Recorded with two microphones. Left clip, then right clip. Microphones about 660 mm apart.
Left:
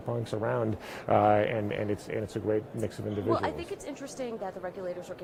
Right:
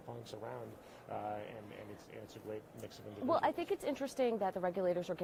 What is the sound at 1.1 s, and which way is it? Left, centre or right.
Speech, left.